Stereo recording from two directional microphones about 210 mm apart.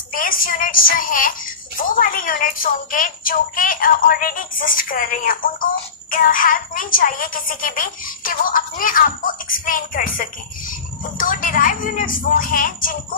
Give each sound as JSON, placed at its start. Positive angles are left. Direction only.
{"t": 0.1, "sound": "speech", "side_deg": 40}